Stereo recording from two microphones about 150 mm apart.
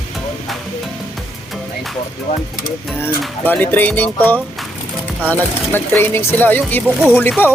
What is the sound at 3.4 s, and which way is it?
Speech, 10° left (ahead or behind).